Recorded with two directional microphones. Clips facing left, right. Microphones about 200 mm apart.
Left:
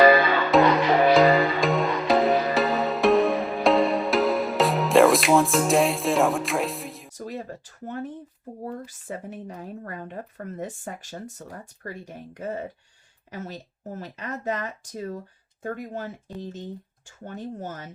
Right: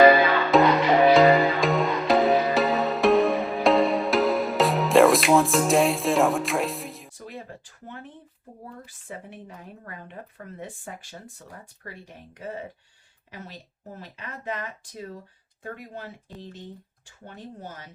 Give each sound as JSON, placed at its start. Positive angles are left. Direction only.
{"t": 0.5, "sound": "music", "side_deg": 0}
{"t": 7.2, "sound": "a sound", "side_deg": 40}
{"t": 8.6, "sound": "speech", "side_deg": 40}